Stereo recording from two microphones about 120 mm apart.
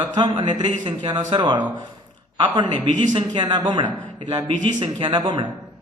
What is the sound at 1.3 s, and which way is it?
A man's voice, 40° right (ahead or behind).